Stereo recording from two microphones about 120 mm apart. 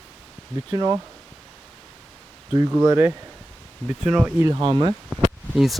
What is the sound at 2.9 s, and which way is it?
Speech, 20° right (ahead or behind).